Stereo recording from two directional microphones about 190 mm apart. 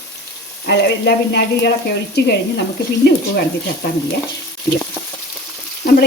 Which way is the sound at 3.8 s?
55° left (ahead or behind).